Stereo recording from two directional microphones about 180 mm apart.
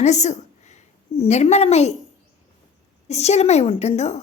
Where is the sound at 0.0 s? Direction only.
40° left (ahead or behind).